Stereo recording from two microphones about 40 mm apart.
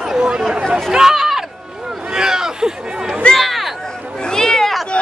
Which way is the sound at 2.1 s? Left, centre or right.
Centre.